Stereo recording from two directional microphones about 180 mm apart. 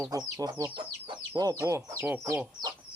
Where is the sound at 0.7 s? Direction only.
30° right (ahead or behind).